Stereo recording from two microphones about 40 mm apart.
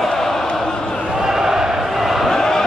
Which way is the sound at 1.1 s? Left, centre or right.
Centre.